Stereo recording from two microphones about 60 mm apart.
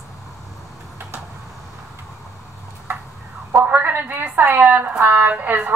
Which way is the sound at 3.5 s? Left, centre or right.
Right.